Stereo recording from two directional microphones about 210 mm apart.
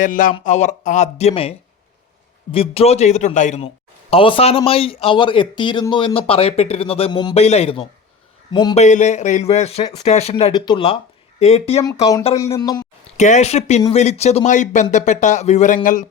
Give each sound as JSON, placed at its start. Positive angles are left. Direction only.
{"t": 0.0, "sound": "a man's voice", "side_deg": 40}
{"t": 8.8, "sound": "a man's voice", "side_deg": 35}
{"t": 11.8, "sound": "speech", "side_deg": 15}
{"t": 13.1, "sound": "speech", "side_deg": 35}